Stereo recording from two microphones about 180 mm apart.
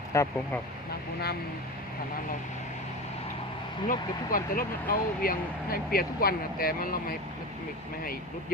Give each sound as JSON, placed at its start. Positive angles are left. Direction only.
{"t": 0.1, "sound": "speech", "side_deg": 15}
{"t": 3.8, "sound": "speech", "side_deg": 50}